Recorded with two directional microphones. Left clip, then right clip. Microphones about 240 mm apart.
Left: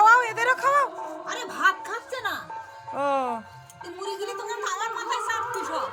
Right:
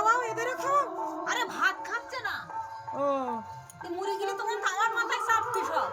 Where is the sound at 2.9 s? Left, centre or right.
Centre.